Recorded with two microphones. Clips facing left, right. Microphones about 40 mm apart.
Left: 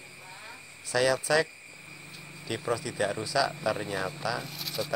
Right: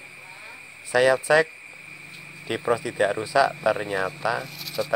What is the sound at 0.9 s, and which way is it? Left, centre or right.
Speech, right.